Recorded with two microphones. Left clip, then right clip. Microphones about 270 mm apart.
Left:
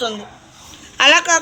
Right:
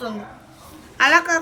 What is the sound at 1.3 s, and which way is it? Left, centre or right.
Speech, centre.